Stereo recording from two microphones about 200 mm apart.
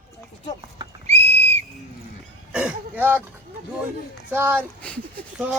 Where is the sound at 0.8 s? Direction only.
30° right (ahead or behind).